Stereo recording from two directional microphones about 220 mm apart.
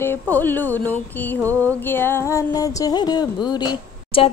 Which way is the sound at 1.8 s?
10° left (ahead or behind).